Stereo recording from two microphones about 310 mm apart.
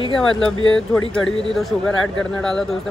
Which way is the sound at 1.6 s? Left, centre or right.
Centre.